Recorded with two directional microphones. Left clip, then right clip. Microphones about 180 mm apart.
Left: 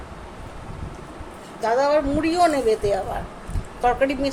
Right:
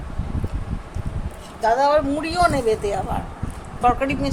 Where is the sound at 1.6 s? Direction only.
5° left (ahead or behind).